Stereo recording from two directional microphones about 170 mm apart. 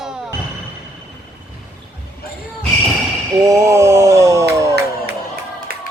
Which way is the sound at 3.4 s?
20° right (ahead or behind).